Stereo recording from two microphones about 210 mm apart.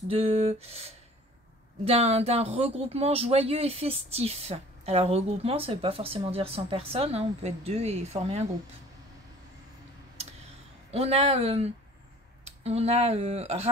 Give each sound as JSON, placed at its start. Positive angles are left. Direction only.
{"t": 0.1, "sound": "speech", "side_deg": -25}
{"t": 10.9, "sound": "speech", "side_deg": -30}